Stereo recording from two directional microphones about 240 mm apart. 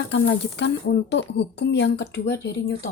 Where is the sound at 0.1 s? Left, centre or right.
Left.